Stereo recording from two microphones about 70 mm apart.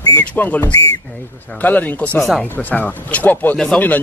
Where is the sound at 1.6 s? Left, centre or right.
Left.